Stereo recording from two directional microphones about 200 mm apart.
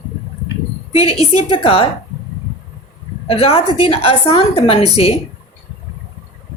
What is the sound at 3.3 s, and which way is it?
Speech, 30° left (ahead or behind).